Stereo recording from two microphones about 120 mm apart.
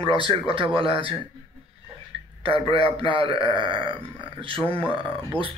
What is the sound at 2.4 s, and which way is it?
Speech, 50° right (ahead or behind).